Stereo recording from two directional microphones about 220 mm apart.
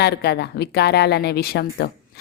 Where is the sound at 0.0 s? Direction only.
50° left (ahead or behind).